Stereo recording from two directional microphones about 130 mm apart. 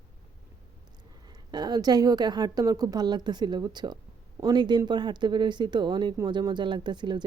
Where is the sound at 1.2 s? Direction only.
30° right (ahead or behind).